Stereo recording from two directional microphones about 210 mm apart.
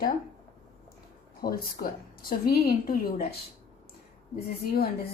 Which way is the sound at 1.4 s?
45° left (ahead or behind).